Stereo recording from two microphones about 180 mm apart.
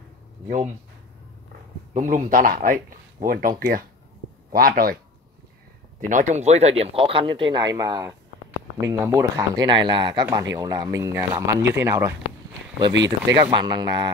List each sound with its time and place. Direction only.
2.0 s speech: 45° right (ahead or behind)
5.9 s speech: 45° right (ahead or behind); by 9.7 s 15° right (ahead or behind)
9.7 s speech: 25° right (ahead or behind)